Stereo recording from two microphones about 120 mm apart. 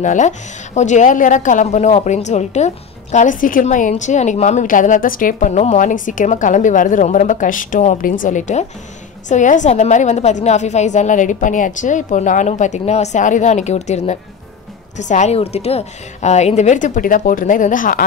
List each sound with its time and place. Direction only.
0.0 s a woman's voice: 90° left; by 14.1 s 70° left (ahead or behind)
15.0 s a woman's voice: 80° left